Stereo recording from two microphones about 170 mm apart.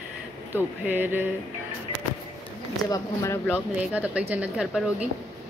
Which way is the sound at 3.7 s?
10° right (ahead or behind).